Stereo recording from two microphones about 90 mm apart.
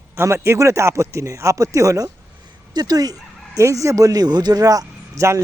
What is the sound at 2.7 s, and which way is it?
Speech, 45° right (ahead or behind).